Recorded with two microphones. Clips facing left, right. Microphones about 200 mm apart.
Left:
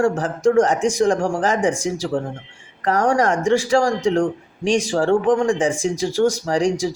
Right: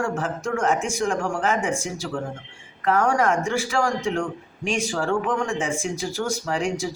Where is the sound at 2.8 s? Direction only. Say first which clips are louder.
Left 3 dB; 35° left (ahead or behind).